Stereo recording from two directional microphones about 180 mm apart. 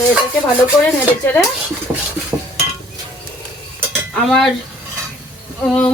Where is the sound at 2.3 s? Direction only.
15° right (ahead or behind).